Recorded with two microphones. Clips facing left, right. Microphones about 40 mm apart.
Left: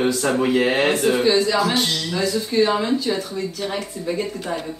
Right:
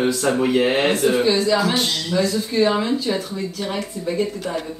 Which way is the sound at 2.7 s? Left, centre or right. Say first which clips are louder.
Even; centre.